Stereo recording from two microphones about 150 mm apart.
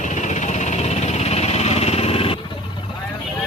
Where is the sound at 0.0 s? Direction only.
55° left (ahead or behind).